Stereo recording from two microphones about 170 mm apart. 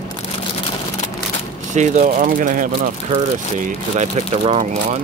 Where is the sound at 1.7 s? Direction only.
45° right (ahead or behind).